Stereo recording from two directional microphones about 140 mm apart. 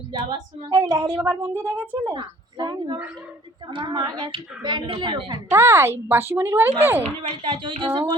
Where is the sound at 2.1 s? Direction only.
30° right (ahead or behind).